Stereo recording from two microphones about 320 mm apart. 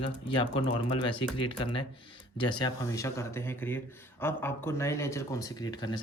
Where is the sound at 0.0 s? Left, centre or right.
Centre.